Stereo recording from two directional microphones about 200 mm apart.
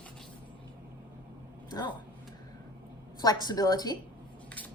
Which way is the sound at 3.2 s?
20° left (ahead or behind).